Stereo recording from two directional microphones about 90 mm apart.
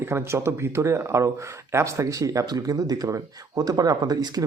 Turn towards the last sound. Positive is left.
turn(degrees=-45)  # may be behind; listen again after turning